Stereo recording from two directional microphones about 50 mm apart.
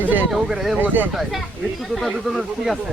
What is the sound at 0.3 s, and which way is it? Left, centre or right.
Speech, centre.